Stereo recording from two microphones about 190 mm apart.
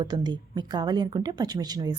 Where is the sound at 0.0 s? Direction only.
20° right (ahead or behind).